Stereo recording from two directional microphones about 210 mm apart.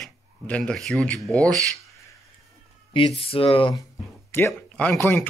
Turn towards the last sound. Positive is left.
turn(degrees=10)  # may be behind; listen again after turning